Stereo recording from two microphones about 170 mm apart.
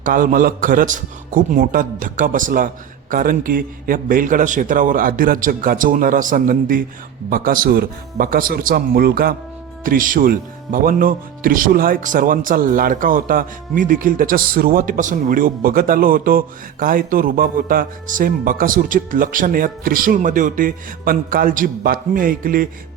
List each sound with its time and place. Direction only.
0.0 s a man's voice: 50° right (ahead or behind)